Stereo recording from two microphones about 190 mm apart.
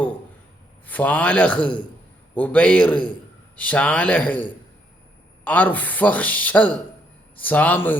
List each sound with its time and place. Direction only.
0.9 s speech: 10° left (ahead or behind)
5.5 s speech: 10° left (ahead or behind)